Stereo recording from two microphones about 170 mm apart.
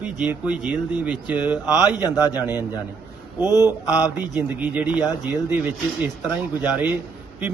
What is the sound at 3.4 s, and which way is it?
Speech, 20° left (ahead or behind).